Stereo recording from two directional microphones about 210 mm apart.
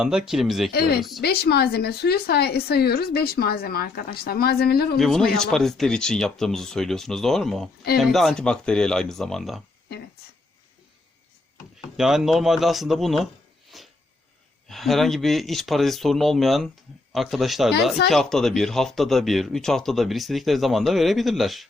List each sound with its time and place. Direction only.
0.0 s speech: 5° right (ahead or behind)
0.7 s a woman's voice: 45° left (ahead or behind)
4.9 s speech: centre (ahead or behind)
11.9 s speech: centre (ahead or behind)
13.7 s a sound: centre (ahead or behind)
14.7 s speech: centre (ahead or behind)